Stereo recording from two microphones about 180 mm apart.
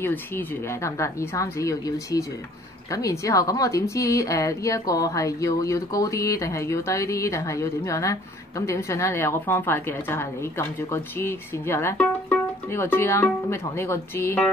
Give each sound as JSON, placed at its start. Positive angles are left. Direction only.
{"t": 0.0, "sound": "a woman's voice", "side_deg": 10}